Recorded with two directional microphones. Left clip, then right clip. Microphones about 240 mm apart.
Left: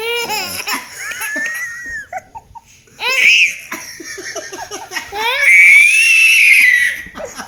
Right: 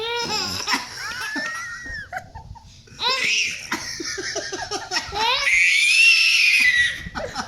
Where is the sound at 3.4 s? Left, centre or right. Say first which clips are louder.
Left 7 dB; centre.